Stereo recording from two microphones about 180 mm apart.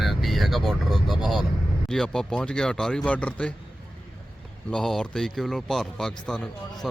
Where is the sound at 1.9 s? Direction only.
5° left (ahead or behind).